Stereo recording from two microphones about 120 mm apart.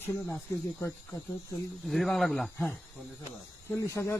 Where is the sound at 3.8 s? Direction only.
25° left (ahead or behind).